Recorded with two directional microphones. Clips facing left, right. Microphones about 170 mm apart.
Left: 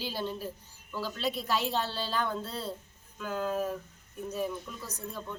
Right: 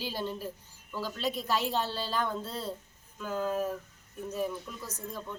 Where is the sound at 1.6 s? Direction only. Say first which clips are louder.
Even; 10° right (ahead or behind).